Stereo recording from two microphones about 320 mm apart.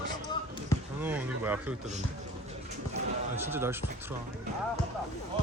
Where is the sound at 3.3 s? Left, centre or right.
Centre.